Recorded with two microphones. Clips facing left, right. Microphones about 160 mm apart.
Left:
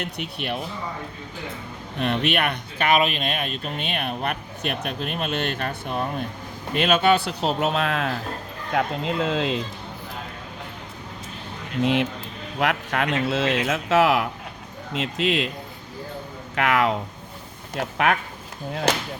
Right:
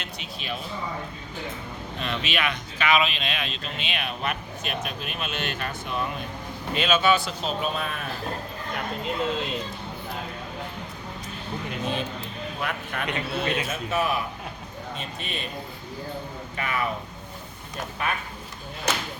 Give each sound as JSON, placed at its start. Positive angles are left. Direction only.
{"t": 0.0, "sound": "speech", "side_deg": 60}
{"t": 2.0, "sound": "speech", "side_deg": 60}
{"t": 11.8, "sound": "speech", "side_deg": 85}
{"t": 16.6, "sound": "speech", "side_deg": 90}